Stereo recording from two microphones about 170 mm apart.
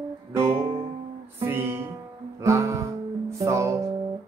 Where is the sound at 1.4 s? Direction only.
15° right (ahead or behind).